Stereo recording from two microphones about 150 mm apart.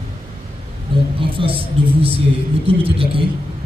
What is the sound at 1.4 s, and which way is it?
Speech, 35° right (ahead or behind).